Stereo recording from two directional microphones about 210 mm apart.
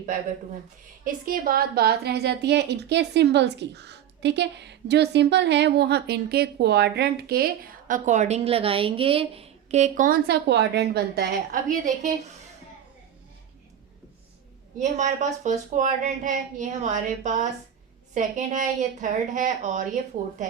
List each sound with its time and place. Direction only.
1.0 s a woman's voice: 45° right (ahead or behind)
14.8 s speech: 35° right (ahead or behind)